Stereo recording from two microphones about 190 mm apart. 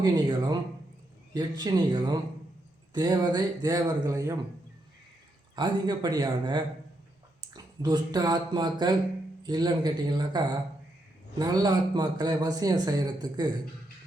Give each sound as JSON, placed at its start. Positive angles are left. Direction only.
{"t": 0.0, "sound": "a man's voice", "side_deg": -20}
{"t": 5.5, "sound": "a man's voice", "side_deg": -20}